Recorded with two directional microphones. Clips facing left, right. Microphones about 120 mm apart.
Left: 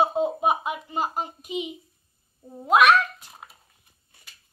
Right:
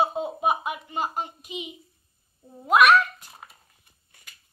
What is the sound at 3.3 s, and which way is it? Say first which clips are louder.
Dishes: left 1 dB; 5° left (ahead or behind).